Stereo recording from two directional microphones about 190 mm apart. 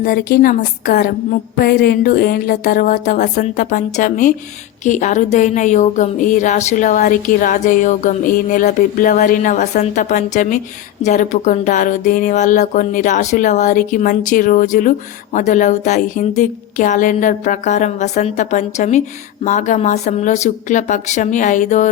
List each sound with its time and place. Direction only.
0.0 s speech: 50° left (ahead or behind)